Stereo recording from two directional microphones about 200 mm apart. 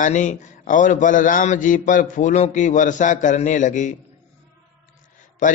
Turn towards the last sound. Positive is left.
turn(degrees=40)  # may be behind; listen again after turning